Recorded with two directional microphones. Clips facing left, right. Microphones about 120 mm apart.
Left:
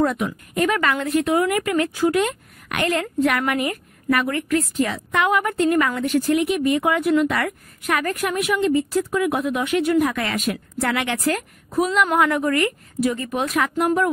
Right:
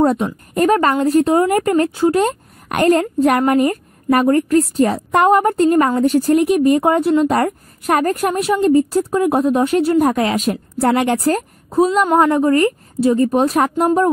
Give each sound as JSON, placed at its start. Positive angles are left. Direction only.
{"t": 0.0, "sound": "a woman's voice", "side_deg": -35}